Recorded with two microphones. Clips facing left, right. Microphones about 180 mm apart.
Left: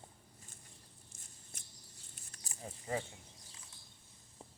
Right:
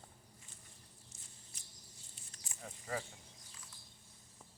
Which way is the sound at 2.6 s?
20° left (ahead or behind).